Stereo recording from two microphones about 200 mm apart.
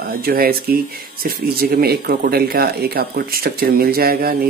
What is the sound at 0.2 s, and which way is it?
Speech, 50° right (ahead or behind).